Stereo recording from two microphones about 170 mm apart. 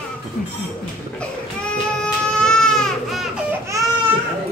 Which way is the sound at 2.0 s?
5° left (ahead or behind).